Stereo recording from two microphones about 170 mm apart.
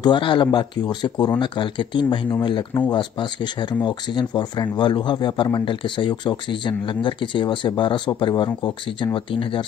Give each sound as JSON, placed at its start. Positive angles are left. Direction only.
{"t": 0.0, "sound": "speech", "side_deg": 30}